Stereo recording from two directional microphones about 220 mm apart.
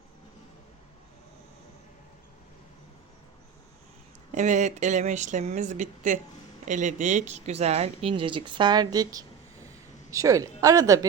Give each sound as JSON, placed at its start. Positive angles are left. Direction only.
{"t": 4.3, "sound": "a woman's voice", "side_deg": -35}